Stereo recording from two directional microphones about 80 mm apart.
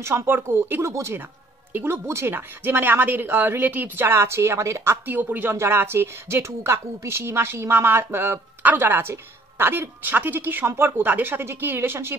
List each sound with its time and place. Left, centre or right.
0.0 s speech: right
5.0 s speech: right